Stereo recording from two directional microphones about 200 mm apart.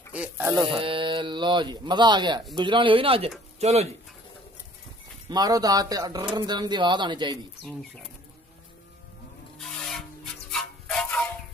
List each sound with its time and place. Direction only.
0.1 s speech: 10° right (ahead or behind)
0.7 s speech: 25° right (ahead or behind)
5.3 s speech: 20° right (ahead or behind)
9.6 s rub: centre (ahead or behind)